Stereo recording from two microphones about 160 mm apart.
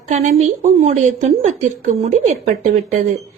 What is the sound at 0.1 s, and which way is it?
A woman's voice, 45° right (ahead or behind).